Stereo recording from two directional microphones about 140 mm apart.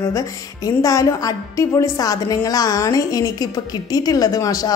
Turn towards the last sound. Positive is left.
turn(degrees=25)  # may be behind; listen again after turning